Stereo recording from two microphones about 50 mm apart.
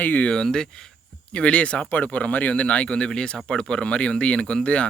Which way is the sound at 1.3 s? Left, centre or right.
Left.